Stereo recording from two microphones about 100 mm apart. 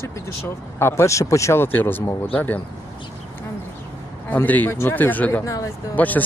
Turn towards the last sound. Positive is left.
turn(degrees=15)  # may be behind; listen again after turning